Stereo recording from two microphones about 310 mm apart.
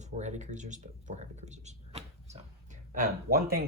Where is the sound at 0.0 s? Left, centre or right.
Right.